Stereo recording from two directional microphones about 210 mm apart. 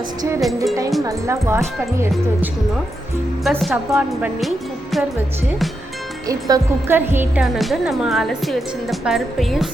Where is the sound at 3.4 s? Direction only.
Centre (ahead or behind).